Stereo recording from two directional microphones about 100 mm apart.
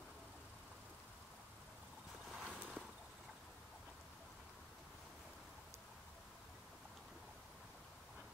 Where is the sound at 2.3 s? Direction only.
Centre (ahead or behind).